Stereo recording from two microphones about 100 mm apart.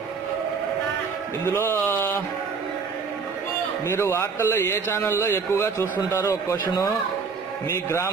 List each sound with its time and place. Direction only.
1.4 s a man's voice: 25° left (ahead or behind)
3.8 s a man's voice: 25° left (ahead or behind)
7.6 s a man's voice: 25° left (ahead or behind)